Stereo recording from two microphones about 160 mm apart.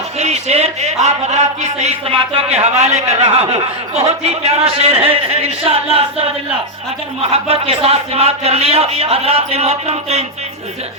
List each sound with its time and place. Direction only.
0.2 s a man's voice: 45° right (ahead or behind)
7.2 s a man's voice: 35° right (ahead or behind)